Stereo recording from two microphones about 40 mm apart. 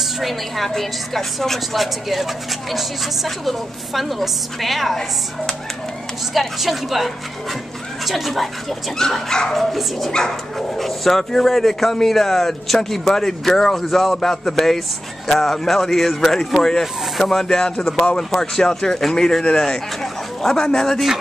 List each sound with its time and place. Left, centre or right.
0.0 s a woman's voice: centre
6.3 s speech: centre
8.9 s speech: centre
9.5 s speech: centre
17.5 s speech: centre